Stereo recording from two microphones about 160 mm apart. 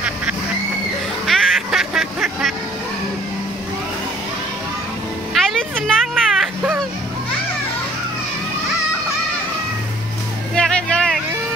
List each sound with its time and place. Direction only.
0.0 s duck: 10° right (ahead or behind)
1.2 s music: centre (ahead or behind)
5.3 s music: centre (ahead or behind)
10.5 s music: 5° left (ahead or behind)